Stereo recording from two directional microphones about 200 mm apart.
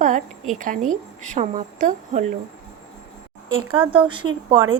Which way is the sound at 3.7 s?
25° right (ahead or behind).